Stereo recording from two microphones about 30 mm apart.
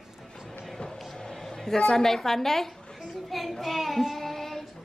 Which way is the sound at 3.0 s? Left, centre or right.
Centre.